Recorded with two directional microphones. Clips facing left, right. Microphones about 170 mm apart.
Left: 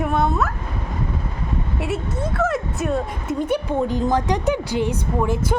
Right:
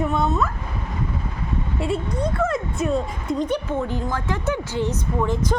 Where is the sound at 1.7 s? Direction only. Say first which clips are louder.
Right 2 dB; 5° left (ahead or behind).